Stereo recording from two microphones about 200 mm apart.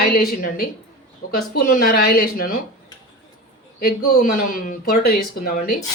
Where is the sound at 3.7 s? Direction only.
50° left (ahead or behind).